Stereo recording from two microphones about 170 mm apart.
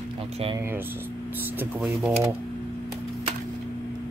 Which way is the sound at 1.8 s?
10° right (ahead or behind).